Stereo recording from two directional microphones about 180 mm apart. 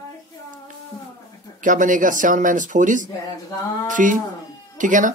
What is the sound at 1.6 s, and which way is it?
Speech, 45° right (ahead or behind).